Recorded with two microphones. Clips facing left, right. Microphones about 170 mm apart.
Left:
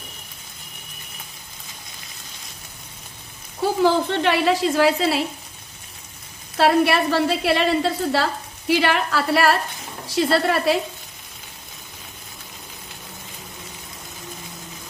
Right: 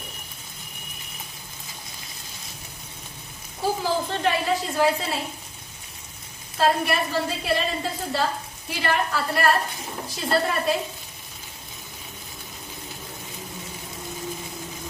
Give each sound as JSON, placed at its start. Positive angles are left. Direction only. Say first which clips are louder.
{"t": 3.8, "sound": "a woman's voice", "louder": "left 9 dB", "side_deg": 75}
{"t": 6.5, "sound": "a woman's voice", "louder": "left 5 dB", "side_deg": 75}
{"t": 10.1, "sound": "a woman's voice", "louder": "left 5 dB", "side_deg": 80}